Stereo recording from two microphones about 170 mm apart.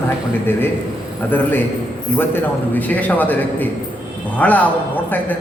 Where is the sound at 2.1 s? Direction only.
10° left (ahead or behind).